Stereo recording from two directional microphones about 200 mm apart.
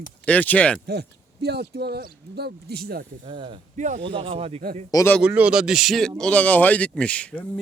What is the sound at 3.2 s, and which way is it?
Speech, 25° right (ahead or behind).